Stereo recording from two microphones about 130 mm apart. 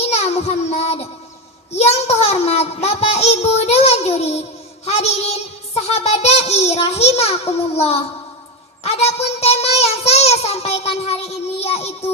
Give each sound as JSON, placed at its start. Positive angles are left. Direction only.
{"t": 0.0, "sound": "child singing", "side_deg": 55}
{"t": 4.9, "sound": "a child's voice", "side_deg": 55}